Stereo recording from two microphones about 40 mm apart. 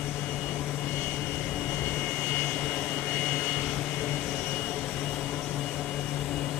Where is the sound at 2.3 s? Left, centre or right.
Left.